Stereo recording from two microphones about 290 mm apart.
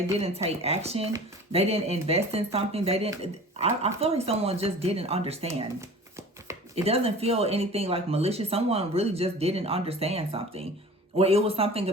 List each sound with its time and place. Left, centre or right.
0.2 s speech: right
6.8 s speech: right